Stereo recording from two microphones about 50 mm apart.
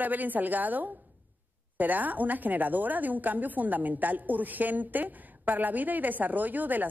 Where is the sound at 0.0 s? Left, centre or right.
Right.